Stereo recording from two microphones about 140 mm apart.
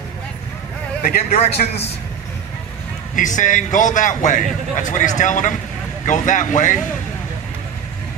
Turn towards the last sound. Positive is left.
turn(degrees=65)  # may be behind; listen again after turning